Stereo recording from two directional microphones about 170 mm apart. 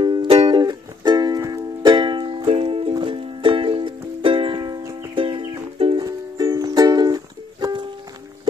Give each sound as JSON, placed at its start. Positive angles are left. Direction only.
{"t": 0.0, "sound": "music", "side_deg": -30}
{"t": 6.0, "sound": "music", "side_deg": -20}